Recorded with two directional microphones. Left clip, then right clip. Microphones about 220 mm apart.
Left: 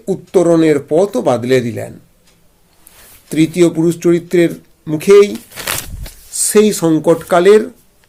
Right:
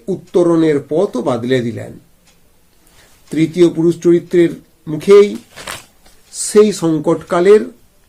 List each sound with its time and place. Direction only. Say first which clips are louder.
0.1 s speech: left 2 dB; 30° left (ahead or behind)
3.2 s speech: even; 30° left (ahead or behind)